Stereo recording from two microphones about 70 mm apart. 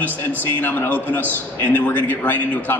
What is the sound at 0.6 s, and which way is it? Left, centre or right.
A man's voice, left.